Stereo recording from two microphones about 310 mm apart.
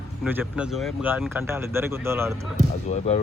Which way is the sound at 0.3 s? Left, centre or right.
Centre.